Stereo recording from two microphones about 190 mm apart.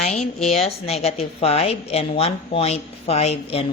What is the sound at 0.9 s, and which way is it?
Speech, 35° left (ahead or behind).